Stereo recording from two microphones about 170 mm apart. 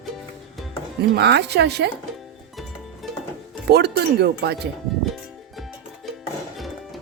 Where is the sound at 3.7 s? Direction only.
70° right (ahead or behind).